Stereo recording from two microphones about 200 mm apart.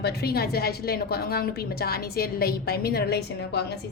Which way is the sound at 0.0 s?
50° left (ahead or behind).